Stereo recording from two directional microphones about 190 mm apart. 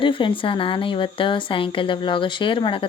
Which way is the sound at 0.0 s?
25° left (ahead or behind).